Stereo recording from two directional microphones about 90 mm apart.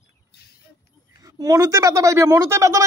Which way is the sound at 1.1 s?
40° right (ahead or behind).